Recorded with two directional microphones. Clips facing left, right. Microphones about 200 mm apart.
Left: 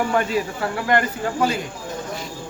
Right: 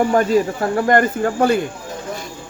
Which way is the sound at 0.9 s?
50° right (ahead or behind).